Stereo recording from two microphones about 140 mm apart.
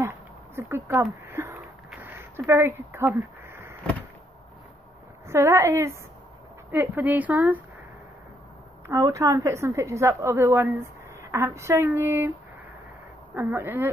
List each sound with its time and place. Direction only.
0.0 s speech: 15° right (ahead or behind)
3.2 s a sound: 15° right (ahead or behind)
5.3 s a woman's voice: 20° right (ahead or behind)
8.8 s a woman's voice: 20° right (ahead or behind)
13.3 s speech: 15° right (ahead or behind)